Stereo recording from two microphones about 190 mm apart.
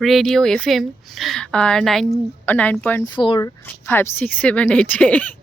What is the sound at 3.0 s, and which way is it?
Speech, 25° left (ahead or behind).